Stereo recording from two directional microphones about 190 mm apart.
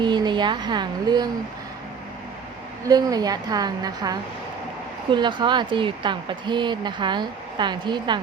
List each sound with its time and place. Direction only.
0.0 s a woman's voice: 25° right (ahead or behind)
2.8 s speech: 20° right (ahead or behind)